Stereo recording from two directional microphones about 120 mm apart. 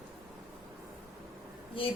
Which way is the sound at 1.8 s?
50° left (ahead or behind).